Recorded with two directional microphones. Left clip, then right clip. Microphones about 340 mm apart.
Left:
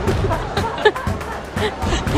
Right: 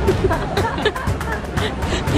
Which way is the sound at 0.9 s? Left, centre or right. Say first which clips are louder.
Left 4 dB; left.